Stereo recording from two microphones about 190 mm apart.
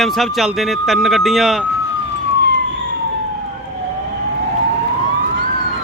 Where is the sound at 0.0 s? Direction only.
Centre (ahead or behind).